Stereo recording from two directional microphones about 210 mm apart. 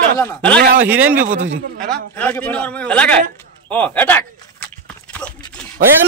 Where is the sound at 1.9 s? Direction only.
5° left (ahead or behind).